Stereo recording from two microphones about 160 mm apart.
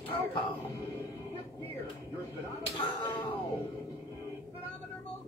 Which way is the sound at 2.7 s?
30° left (ahead or behind).